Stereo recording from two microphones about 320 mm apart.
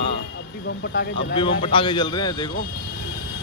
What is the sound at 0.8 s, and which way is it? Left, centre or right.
Speech, left.